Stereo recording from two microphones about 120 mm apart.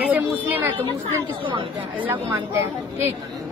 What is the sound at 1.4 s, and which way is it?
Speech, 45° right (ahead or behind).